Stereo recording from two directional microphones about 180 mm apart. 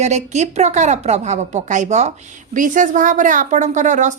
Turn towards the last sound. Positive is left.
turn(degrees=-45)  # may be behind; listen again after turning